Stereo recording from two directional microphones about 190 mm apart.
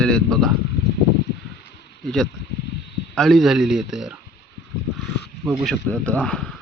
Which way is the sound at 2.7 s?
60° left (ahead or behind).